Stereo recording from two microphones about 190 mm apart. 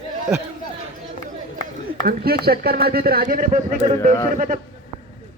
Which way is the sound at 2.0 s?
55° right (ahead or behind).